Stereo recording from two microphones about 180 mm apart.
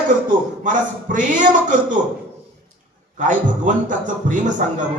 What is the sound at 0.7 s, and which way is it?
Speech, 45° right (ahead or behind).